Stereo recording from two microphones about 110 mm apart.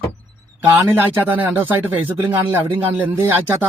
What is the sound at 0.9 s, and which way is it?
Speech, 15° right (ahead or behind).